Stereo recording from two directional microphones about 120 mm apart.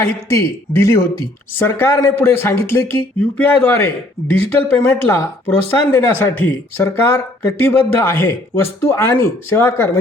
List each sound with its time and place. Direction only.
0.0 s speech: 25° left (ahead or behind)